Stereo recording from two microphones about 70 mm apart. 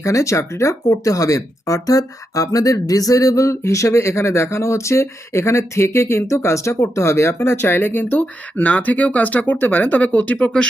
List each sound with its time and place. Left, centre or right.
0.0 s speech: left; by 10.7 s centre